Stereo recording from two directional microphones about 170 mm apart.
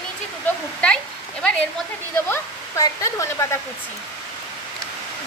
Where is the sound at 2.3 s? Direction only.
20° left (ahead or behind).